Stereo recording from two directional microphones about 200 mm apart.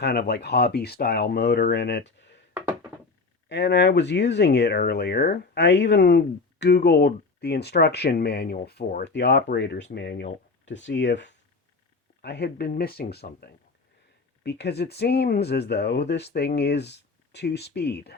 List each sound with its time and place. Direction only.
0.0 s speech: 55° left (ahead or behind)
2.5 s a sound: 10° right (ahead or behind)
3.5 s speech: 60° left (ahead or behind)